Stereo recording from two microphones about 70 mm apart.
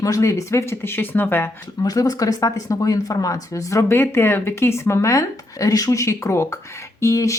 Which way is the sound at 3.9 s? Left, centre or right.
Left.